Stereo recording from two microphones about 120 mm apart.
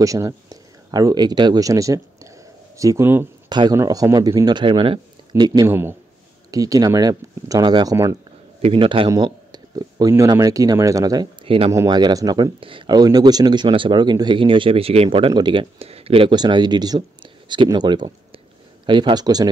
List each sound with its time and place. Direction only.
0.0 s speech: 30° right (ahead or behind)
3.4 s speech: 35° right (ahead or behind)
4.6 s speech: 45° right (ahead or behind)
5.4 s speech: 35° right (ahead or behind)
5.7 s speech: 20° right (ahead or behind)
6.5 s speech: 30° right (ahead or behind)
8.5 s speech: 50° right (ahead or behind); by 11.2 s 30° right (ahead or behind)
11.4 s speech: 45° right (ahead or behind)
11.9 s speech: 35° right (ahead or behind)
12.5 s speech: 45° right (ahead or behind)
15.8 s speech: 55° right (ahead or behind)
16.3 s speech: 40° right (ahead or behind)